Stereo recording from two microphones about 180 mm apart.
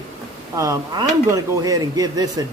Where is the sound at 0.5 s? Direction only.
15° right (ahead or behind).